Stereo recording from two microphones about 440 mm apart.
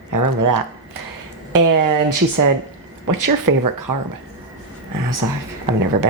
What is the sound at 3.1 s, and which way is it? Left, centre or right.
Speech, right.